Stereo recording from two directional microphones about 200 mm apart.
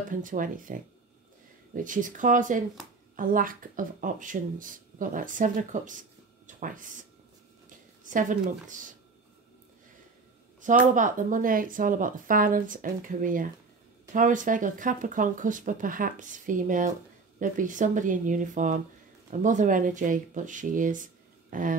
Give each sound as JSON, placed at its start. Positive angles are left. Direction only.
{"t": 0.1, "sound": "speech", "side_deg": -40}
{"t": 1.8, "sound": "speech", "side_deg": -40}
{"t": 10.6, "sound": "speech", "side_deg": -40}